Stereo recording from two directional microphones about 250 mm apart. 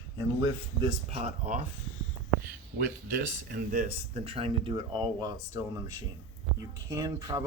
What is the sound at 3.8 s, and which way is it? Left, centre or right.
Speech, right.